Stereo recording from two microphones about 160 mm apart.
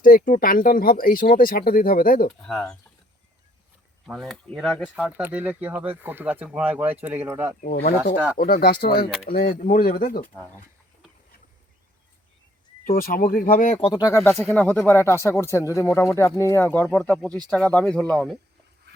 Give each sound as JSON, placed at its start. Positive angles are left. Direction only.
{"t": 0.3, "sound": "speech", "side_deg": 60}
{"t": 2.4, "sound": "speech", "side_deg": 5}
{"t": 4.0, "sound": "speech", "side_deg": 0}
{"t": 4.9, "sound": "speech", "side_deg": -10}
{"t": 7.6, "sound": "speech", "side_deg": 60}
{"t": 9.3, "sound": "speech", "side_deg": 55}
{"t": 12.8, "sound": "speech", "side_deg": 65}
{"t": 13.8, "sound": "speech", "side_deg": 25}
{"t": 14.5, "sound": "speech", "side_deg": 10}